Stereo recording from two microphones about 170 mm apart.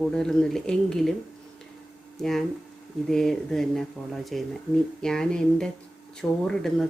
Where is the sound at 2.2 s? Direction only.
Centre (ahead or behind).